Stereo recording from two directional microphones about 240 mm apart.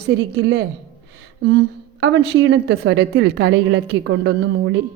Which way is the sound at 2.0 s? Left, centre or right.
Right.